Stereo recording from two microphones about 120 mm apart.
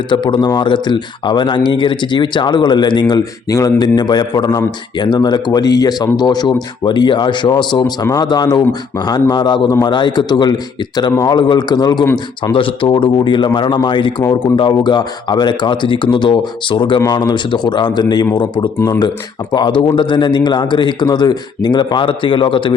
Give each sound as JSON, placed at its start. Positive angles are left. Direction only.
{"t": 0.1, "sound": "speech", "side_deg": 40}